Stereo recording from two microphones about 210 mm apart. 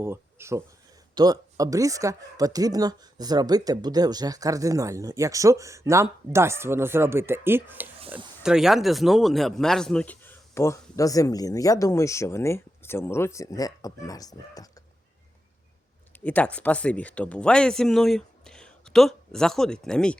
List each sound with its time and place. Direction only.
0.0 s a man's voice: 10° right (ahead or behind); by 14.7 s 15° left (ahead or behind)
16.2 s speech: 5° left (ahead or behind)